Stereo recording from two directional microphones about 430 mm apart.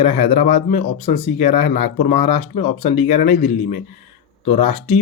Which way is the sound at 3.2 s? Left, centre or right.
Left.